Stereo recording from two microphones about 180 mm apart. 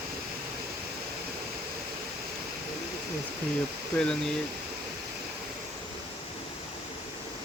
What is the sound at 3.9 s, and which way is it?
Speech, 5° left (ahead or behind).